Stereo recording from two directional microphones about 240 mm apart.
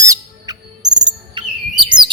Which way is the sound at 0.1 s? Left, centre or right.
Centre.